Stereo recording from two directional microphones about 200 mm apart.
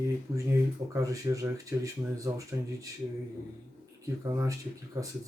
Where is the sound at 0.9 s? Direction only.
15° right (ahead or behind).